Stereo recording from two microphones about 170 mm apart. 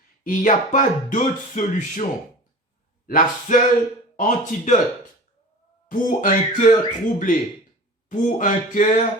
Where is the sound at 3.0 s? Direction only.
55° left (ahead or behind).